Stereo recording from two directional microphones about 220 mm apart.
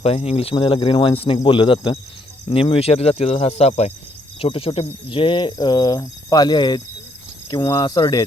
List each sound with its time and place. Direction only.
0.0 s speech: 25° left (ahead or behind)